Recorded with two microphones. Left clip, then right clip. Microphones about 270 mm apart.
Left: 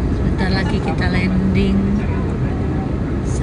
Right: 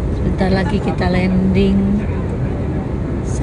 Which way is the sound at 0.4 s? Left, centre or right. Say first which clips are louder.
Right 4 dB; centre.